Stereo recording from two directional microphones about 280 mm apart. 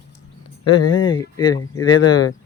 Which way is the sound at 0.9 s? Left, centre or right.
Left.